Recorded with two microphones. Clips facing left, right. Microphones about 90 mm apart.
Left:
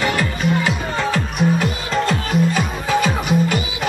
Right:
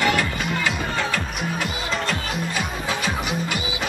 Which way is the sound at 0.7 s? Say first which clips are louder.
Left 3 dB; 35° left (ahead or behind).